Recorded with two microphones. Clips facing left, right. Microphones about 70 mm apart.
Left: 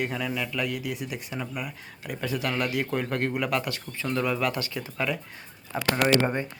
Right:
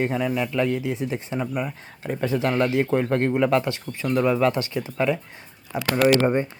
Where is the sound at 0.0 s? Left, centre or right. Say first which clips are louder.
Right 6 dB; right.